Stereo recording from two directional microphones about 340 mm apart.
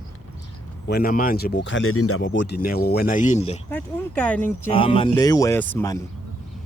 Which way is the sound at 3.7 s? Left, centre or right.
Centre.